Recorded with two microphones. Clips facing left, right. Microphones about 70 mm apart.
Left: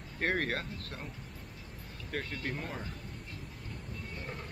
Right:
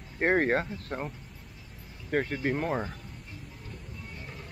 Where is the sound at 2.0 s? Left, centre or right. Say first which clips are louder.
Right 9 dB; right.